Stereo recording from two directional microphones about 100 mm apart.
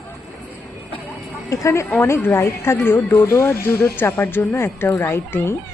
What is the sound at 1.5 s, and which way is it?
Speech, 30° left (ahead or behind).